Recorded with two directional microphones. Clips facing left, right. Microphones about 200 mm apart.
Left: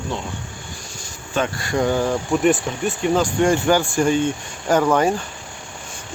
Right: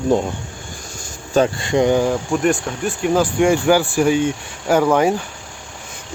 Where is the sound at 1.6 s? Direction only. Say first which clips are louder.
Right 4 dB; 20° right (ahead or behind).